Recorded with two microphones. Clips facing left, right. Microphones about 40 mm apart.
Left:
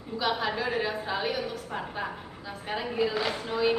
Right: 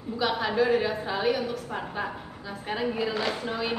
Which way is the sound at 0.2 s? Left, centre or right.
Centre.